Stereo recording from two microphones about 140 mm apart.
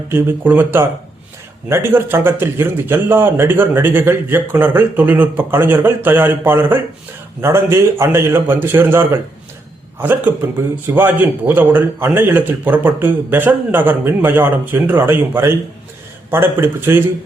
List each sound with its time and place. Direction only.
0.1 s a man's voice: 15° right (ahead or behind)